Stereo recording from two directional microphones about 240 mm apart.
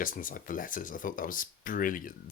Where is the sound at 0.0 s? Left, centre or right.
Left.